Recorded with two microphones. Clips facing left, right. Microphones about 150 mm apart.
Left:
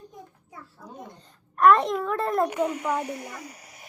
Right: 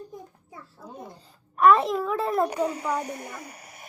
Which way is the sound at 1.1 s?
5° right (ahead or behind).